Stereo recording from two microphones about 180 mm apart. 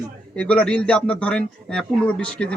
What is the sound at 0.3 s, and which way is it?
A man's voice, 5° left (ahead or behind).